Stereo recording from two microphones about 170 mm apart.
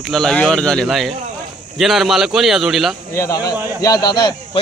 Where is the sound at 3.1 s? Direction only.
20° left (ahead or behind).